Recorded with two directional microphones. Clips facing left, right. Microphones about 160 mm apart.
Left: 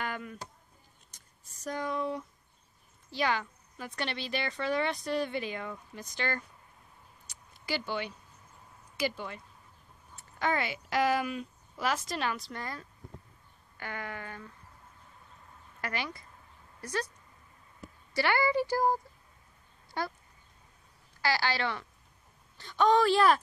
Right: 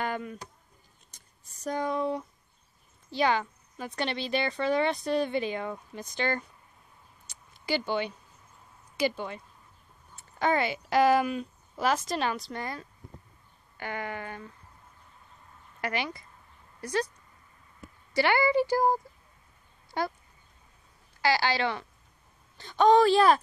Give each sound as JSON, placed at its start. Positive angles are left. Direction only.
{"t": 0.0, "sound": "a sound", "side_deg": -25}
{"t": 1.6, "sound": "a woman's voice", "side_deg": -25}
{"t": 7.6, "sound": "a woman's voice", "side_deg": -20}
{"t": 10.4, "sound": "a woman's voice", "side_deg": -25}
{"t": 15.8, "sound": "speech", "side_deg": -20}
{"t": 18.1, "sound": "a woman's voice", "side_deg": -20}
{"t": 21.2, "sound": "a woman's voice", "side_deg": -20}